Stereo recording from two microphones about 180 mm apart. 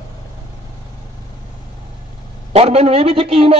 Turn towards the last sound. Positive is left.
turn(degrees=-30)  # may be behind; listen again after turning